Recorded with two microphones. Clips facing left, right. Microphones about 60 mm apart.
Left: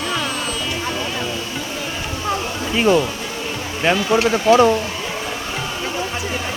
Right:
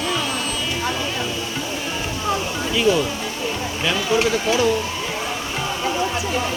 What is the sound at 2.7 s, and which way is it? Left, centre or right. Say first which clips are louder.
Speech: left 2 dB; left.